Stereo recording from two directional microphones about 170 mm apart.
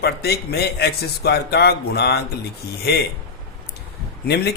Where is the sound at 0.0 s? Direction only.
70° left (ahead or behind).